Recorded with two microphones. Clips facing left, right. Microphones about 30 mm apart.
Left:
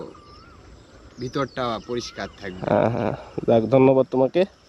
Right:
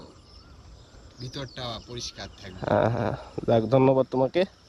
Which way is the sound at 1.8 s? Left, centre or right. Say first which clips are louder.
Left 9 dB; centre.